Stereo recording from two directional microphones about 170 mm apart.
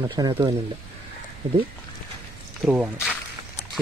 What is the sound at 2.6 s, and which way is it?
Speech, 5° right (ahead or behind).